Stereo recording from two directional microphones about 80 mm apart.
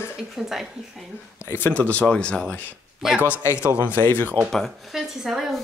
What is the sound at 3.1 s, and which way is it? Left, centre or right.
Speech, centre.